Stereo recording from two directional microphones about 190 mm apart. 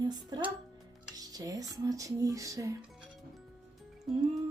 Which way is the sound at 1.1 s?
20° right (ahead or behind).